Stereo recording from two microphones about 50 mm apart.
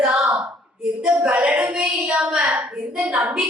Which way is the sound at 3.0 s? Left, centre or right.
Right.